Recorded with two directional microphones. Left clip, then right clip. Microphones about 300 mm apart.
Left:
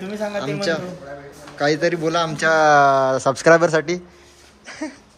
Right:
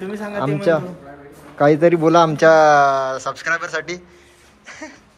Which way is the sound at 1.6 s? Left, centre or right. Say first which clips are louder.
Right 6 dB; centre.